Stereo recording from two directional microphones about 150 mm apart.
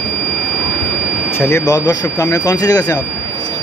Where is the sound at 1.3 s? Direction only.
15° left (ahead or behind).